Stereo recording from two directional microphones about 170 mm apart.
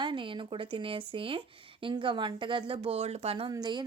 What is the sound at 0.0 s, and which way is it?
Speech, 30° right (ahead or behind).